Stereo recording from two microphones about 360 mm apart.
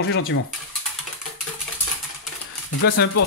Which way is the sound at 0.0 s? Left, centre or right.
Left.